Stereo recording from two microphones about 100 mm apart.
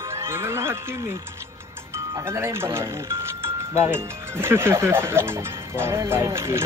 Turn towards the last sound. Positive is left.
turn(degrees=-25)  # may be behind; listen again after turning